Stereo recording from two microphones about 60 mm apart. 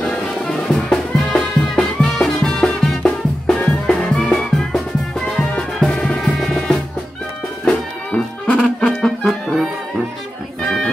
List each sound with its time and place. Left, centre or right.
0.1 s music: centre
7.6 s music: left
9.0 s music: centre
10.6 s music: centre